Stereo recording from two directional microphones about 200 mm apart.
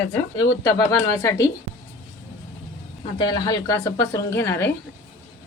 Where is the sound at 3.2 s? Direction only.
20° left (ahead or behind).